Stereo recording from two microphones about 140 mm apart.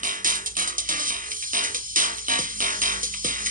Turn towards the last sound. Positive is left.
turn(degrees=-75)  # may be behind; listen again after turning